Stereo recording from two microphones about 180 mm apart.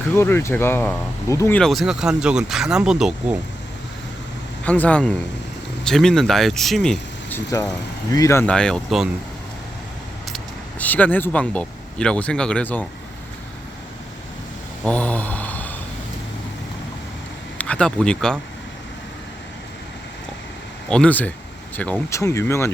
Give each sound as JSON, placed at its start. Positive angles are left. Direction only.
{"t": 0.2, "sound": "speech", "side_deg": 15}
{"t": 1.5, "sound": "speech", "side_deg": 0}
{"t": 4.6, "sound": "speech", "side_deg": 5}
{"t": 10.3, "sound": "speech", "side_deg": 10}
{"t": 14.8, "sound": "a sound", "side_deg": 5}
{"t": 17.6, "sound": "speech", "side_deg": 5}
{"t": 20.9, "sound": "speech", "side_deg": 5}